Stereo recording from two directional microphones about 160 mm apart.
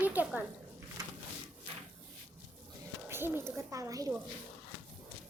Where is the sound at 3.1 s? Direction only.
15° right (ahead or behind).